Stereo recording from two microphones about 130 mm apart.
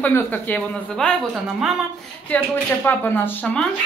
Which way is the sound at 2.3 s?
15° left (ahead or behind).